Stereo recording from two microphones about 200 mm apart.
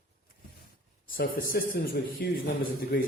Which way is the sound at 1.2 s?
50° left (ahead or behind).